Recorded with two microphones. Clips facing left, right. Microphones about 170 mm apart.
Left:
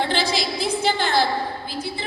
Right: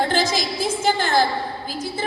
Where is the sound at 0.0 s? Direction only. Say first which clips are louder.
Right 2 dB; 45° right (ahead or behind).